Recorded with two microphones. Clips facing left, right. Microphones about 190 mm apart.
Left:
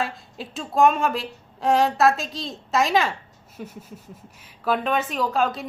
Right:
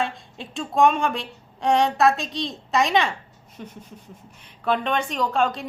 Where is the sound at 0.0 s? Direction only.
Centre (ahead or behind).